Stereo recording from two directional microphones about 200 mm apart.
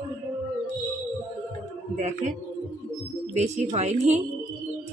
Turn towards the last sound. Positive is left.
turn(degrees=-35)  # may be behind; listen again after turning